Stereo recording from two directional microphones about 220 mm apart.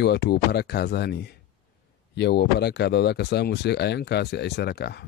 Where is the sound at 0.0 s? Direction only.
50° left (ahead or behind).